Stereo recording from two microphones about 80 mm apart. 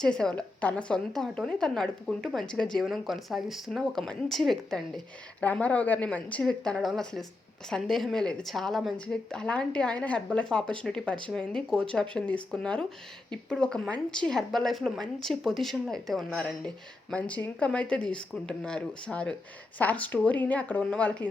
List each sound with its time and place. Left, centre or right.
0.0 s a woman's voice: centre
5.4 s a woman's voice: centre
9.0 s a woman's voice: centre